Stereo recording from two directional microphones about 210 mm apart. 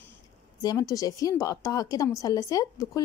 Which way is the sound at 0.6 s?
15° left (ahead or behind).